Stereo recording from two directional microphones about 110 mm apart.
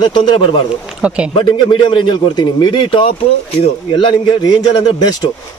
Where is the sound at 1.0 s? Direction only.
10° right (ahead or behind).